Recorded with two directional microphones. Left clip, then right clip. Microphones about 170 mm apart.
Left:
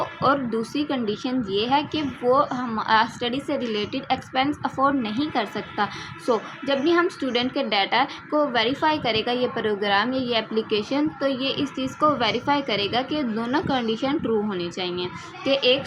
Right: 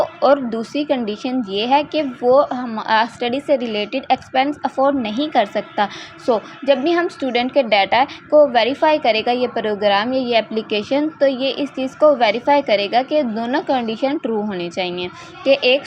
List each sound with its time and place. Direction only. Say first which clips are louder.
0.2 s a woman's voice: right 5 dB; 40° right (ahead or behind)